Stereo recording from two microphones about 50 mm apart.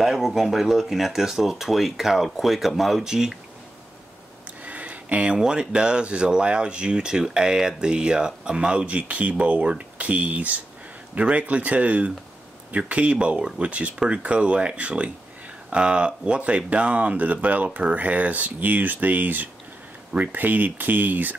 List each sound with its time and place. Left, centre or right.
0.0 s speech: centre
4.6 s speech: right